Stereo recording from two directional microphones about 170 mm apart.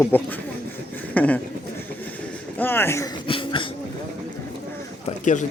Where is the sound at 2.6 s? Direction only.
15° left (ahead or behind).